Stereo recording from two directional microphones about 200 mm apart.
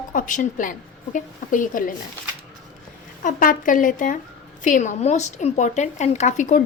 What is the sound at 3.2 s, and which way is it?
A woman's voice, 40° left (ahead or behind).